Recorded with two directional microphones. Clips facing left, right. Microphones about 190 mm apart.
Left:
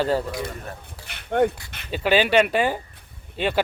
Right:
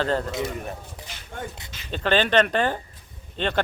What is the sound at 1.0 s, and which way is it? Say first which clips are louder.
Speech: left 16 dB; 65° left (ahead or behind).